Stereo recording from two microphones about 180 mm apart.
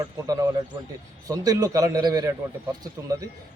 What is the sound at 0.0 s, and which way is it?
A man's voice, 20° right (ahead or behind).